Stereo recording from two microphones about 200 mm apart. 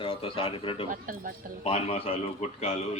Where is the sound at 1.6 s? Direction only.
30° left (ahead or behind).